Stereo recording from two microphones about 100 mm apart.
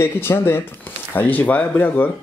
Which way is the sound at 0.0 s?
25° left (ahead or behind).